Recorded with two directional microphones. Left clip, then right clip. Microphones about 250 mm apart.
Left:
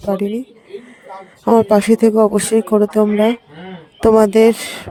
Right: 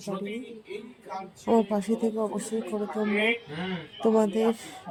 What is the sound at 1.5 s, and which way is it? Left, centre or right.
Speech, left.